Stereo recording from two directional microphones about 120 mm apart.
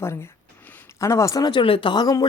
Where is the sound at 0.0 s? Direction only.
20° left (ahead or behind).